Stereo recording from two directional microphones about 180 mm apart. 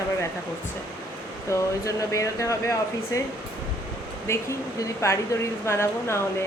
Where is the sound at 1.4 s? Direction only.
15° left (ahead or behind).